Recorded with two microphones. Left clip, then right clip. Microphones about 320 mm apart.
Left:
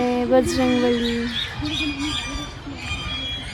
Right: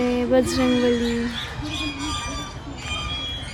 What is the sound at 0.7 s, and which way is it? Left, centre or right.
Speech, centre.